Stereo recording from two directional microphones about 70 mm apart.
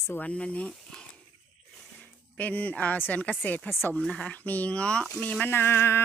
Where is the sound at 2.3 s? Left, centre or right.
Left.